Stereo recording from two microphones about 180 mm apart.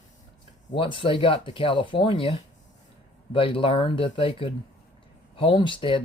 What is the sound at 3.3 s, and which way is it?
Speech, 30° left (ahead or behind).